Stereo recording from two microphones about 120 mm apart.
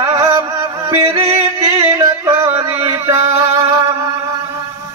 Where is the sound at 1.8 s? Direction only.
25° right (ahead or behind).